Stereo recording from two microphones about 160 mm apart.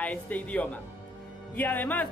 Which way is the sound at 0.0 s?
10° left (ahead or behind).